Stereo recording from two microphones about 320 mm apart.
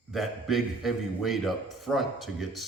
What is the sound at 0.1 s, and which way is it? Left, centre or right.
A man's voice, centre.